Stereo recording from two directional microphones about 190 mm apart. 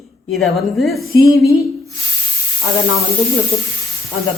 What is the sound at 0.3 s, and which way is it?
Speech, centre (ahead or behind).